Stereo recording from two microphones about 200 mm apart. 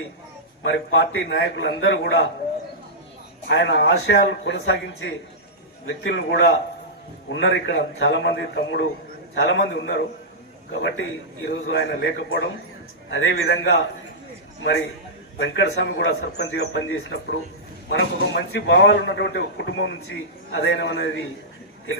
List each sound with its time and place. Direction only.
0.6 s a man's voice: 60° left (ahead or behind)
3.5 s a man's voice: 60° left (ahead or behind)
5.8 s a man's voice: 75° left (ahead or behind); by 13.8 s 60° left (ahead or behind)
15.4 s a man's voice: 60° left (ahead or behind)
15.9 s a man's voice: 70° left (ahead or behind)